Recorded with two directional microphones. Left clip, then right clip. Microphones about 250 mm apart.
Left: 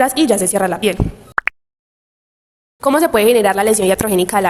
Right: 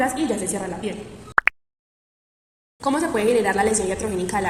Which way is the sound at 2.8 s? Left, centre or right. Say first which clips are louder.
Left 9 dB; left.